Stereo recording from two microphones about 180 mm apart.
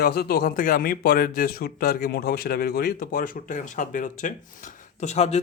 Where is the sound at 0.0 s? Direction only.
60° left (ahead or behind).